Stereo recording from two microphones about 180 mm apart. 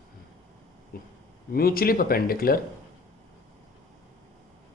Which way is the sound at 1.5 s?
55° left (ahead or behind).